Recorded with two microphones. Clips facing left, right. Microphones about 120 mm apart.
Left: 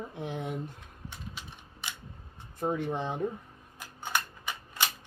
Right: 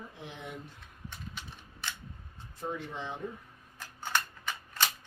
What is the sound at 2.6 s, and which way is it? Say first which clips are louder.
Speech: left 7 dB; 50° left (ahead or behind).